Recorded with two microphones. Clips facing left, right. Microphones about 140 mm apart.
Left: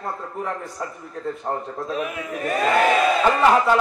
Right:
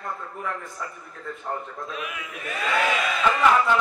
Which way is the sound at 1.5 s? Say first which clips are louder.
Left 3 dB; 40° left (ahead or behind).